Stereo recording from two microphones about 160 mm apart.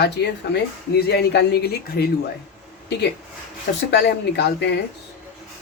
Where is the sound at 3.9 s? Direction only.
90° left.